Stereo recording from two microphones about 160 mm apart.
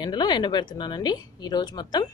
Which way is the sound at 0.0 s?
25° left (ahead or behind).